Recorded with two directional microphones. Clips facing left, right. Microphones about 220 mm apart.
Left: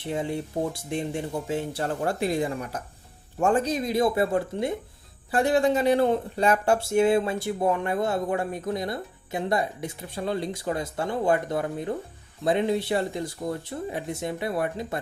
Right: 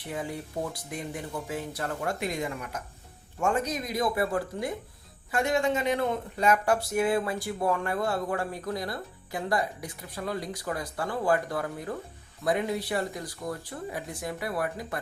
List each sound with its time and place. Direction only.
0.0 s speech: 25° left (ahead or behind)